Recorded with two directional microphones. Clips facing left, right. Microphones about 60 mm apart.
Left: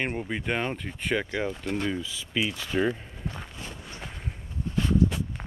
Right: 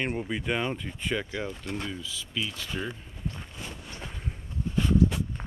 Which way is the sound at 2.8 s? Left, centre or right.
Left.